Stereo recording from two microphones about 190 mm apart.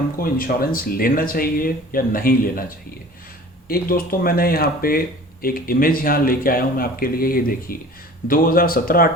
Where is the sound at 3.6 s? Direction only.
50° left (ahead or behind).